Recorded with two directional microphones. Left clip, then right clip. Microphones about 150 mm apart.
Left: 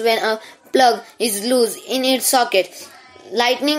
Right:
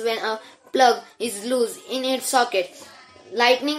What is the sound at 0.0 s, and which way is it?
A woman's voice, 40° left (ahead or behind).